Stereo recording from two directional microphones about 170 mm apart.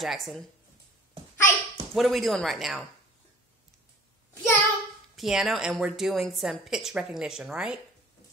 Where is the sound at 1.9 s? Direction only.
Centre (ahead or behind).